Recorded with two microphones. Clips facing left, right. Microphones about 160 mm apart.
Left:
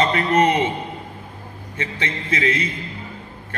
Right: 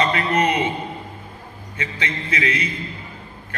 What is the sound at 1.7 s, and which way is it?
Speech, 30° left (ahead or behind).